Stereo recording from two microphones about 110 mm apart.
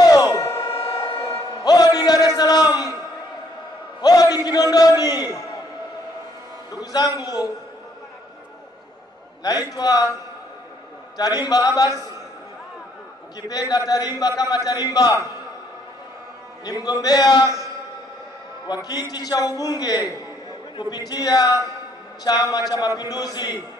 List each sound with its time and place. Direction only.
0.0 s a sound: 35° left (ahead or behind)
1.1 s music: 25° left (ahead or behind)
4.0 s a sound: 35° left (ahead or behind)
6.7 s a man's voice: 35° left (ahead or behind)
9.4 s a man's voice: 35° left (ahead or behind)
11.1 s a man's voice: 35° left (ahead or behind)
13.5 s a man's voice: 35° left (ahead or behind)
16.6 s a man's voice: 35° left (ahead or behind)
18.7 s a man's voice: 35° left (ahead or behind)